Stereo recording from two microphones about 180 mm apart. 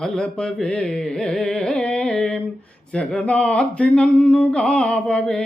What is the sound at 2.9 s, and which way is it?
Speech, 5° left (ahead or behind).